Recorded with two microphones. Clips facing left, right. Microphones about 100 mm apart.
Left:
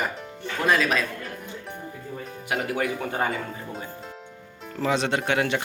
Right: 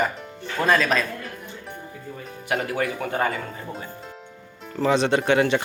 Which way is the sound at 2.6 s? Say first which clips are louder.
Right 1 dB; 15° left (ahead or behind).